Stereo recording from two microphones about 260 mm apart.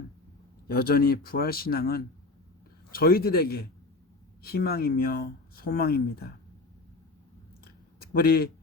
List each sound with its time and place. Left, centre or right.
0.7 s speech: left
8.1 s speech: left